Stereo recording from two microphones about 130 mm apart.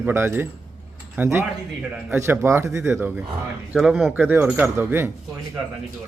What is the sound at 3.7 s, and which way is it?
A man's voice, 5° right (ahead or behind).